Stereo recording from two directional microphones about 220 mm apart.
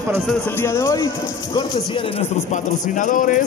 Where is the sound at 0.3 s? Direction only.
10° left (ahead or behind).